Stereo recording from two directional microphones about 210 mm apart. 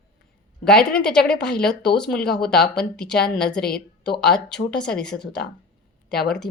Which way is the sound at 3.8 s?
50° left (ahead or behind).